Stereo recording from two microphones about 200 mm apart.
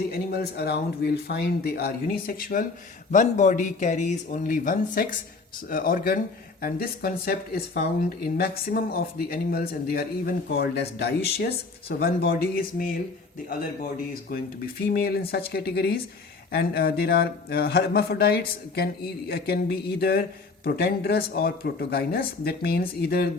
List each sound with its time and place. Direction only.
0.1 s speech: 50° left (ahead or behind)
14.1 s speech: 50° left (ahead or behind)